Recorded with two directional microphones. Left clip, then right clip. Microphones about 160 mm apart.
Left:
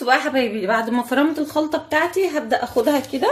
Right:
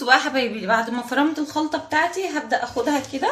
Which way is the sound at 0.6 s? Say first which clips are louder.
Left 1 dB; 40° left (ahead or behind).